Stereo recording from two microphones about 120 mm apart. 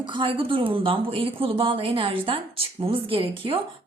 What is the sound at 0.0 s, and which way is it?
A woman's voice, 40° right (ahead or behind).